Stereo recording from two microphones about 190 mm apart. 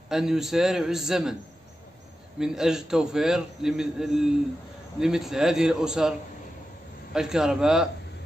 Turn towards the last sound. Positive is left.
turn(degrees=-5)  # may be behind; listen again after turning